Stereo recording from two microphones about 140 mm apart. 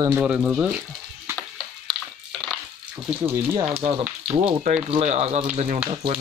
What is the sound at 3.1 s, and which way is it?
Speech, 10° right (ahead or behind).